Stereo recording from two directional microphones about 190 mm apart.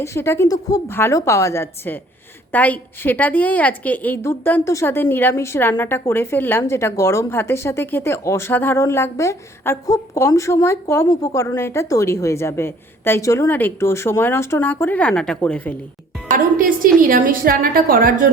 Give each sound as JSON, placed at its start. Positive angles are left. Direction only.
{"t": 0.0, "sound": "a woman's voice", "side_deg": 15}
{"t": 16.3, "sound": "music", "side_deg": -45}
{"t": 17.0, "sound": "a woman's voice", "side_deg": -50}